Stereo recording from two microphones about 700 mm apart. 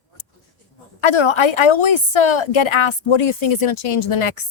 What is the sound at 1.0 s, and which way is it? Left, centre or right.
A woman's voice, left.